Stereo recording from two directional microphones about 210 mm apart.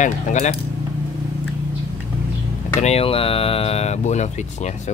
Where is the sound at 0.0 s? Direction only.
35° left (ahead or behind).